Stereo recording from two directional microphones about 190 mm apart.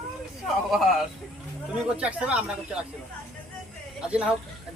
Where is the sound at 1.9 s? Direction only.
5° right (ahead or behind).